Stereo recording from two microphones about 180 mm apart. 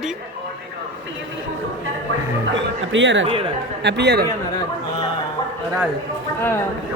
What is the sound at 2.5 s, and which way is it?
Speech, 90° right.